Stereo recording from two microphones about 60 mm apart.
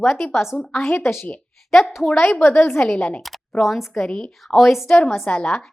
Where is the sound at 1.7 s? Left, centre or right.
Centre.